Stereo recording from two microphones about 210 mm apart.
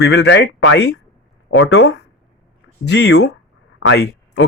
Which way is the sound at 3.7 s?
60° left (ahead or behind).